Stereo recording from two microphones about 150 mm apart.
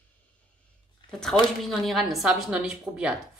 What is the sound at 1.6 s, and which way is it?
A woman's voice, centre (ahead or behind).